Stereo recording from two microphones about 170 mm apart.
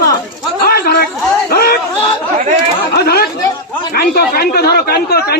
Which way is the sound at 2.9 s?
65° left (ahead or behind).